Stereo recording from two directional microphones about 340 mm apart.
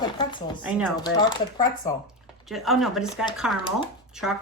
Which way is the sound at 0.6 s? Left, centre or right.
Centre.